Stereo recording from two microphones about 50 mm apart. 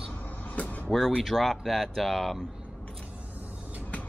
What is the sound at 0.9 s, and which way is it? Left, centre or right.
Speech, centre.